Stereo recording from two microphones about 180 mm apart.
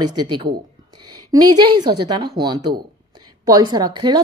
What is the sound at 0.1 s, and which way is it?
A woman's voice, 25° right (ahead or behind).